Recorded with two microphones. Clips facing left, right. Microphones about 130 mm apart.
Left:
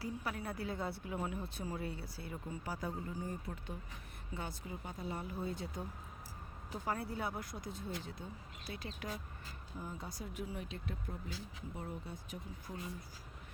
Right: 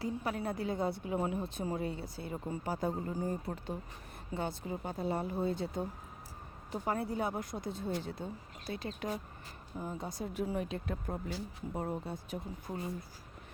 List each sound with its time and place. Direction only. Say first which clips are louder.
0.0 s a woman's voice: right 6 dB; 25° right (ahead or behind)
10.4 s speech: right 9 dB; 50° right (ahead or behind)
12.1 s a woman's voice: right 7 dB; 30° right (ahead or behind)